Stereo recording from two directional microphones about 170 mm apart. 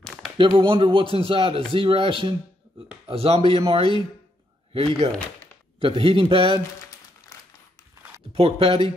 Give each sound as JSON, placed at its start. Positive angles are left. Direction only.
{"t": 0.0, "sound": "a sound", "side_deg": 0}
{"t": 0.4, "sound": "speech", "side_deg": -30}
{"t": 4.7, "sound": "speech", "side_deg": -35}
{"t": 8.3, "sound": "speech", "side_deg": -35}